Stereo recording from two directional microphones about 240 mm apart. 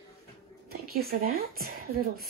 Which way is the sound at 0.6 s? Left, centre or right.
Right.